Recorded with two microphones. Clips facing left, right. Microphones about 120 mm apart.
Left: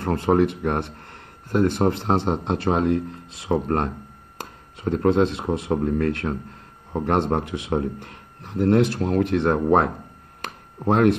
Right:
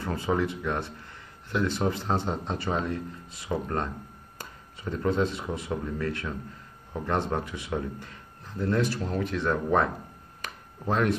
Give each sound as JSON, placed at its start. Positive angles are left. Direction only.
{"t": 0.0, "sound": "speech", "side_deg": 65}
{"t": 1.5, "sound": "a man's voice", "side_deg": 50}
{"t": 10.4, "sound": "a sound", "side_deg": 70}